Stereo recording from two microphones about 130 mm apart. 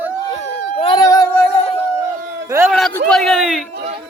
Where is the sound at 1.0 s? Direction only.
25° left (ahead or behind).